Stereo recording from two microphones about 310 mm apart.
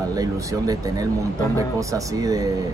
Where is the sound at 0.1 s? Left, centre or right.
Centre.